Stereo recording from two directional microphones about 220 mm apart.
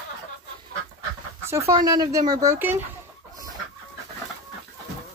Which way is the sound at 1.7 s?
15° right (ahead or behind).